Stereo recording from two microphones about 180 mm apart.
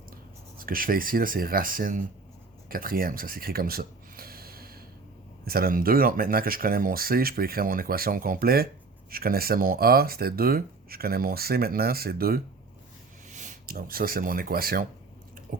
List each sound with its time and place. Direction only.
0.6 s speech: 50° right (ahead or behind)
2.6 s a sound: 50° right (ahead or behind)
5.5 s speech: 55° right (ahead or behind)
13.3 s speech: 45° right (ahead or behind)
15.5 s chewing: 50° right (ahead or behind)